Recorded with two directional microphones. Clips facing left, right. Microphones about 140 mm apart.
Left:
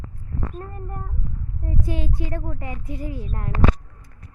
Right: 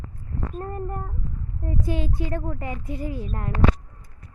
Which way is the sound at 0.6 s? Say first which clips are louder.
Right 5 dB; 35° right (ahead or behind).